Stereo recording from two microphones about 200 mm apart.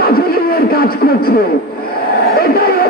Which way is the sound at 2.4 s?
50° left (ahead or behind).